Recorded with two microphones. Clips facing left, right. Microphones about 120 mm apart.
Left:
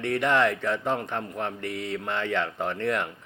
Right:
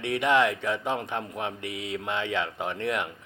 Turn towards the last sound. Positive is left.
turn(degrees=-15)  # may be behind; listen again after turning